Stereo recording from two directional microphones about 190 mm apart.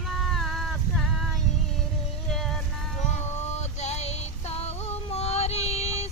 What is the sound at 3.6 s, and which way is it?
Female singing, 35° left (ahead or behind).